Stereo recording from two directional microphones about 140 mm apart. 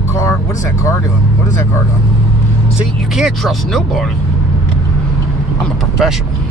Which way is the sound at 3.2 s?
Centre (ahead or behind).